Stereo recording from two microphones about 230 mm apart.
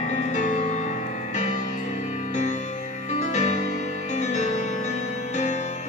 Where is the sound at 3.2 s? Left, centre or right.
Left.